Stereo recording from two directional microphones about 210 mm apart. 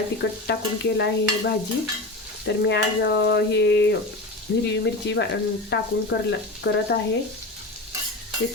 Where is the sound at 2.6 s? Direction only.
55° left (ahead or behind).